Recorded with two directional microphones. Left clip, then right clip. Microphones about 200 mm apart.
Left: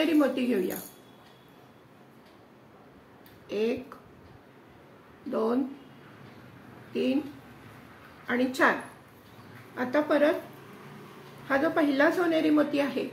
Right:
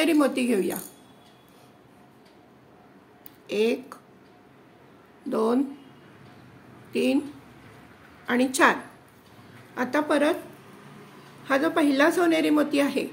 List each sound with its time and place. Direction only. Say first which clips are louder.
0.0 s a woman's voice: right 3 dB; 55° right (ahead or behind)
3.4 s a woman's voice: right 5 dB; 60° right (ahead or behind)
5.3 s a woman's voice: right 4 dB; 60° right (ahead or behind)
6.9 s speech: right 4 dB; 60° right (ahead or behind)
8.3 s a woman's voice: right 4 dB; 60° right (ahead or behind)
9.8 s a woman's voice: right 1 dB; 60° right (ahead or behind)
11.4 s a woman's voice: right 3 dB; 60° right (ahead or behind)